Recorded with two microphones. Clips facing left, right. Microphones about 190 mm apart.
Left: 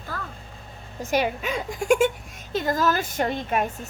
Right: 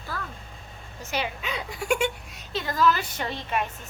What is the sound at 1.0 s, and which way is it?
A woman's voice, 50° left (ahead or behind).